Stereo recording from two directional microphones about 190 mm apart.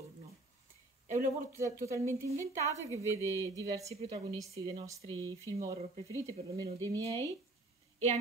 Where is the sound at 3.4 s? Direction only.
15° right (ahead or behind).